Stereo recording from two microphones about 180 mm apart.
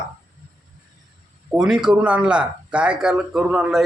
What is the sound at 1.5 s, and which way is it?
Speech, 5° right (ahead or behind).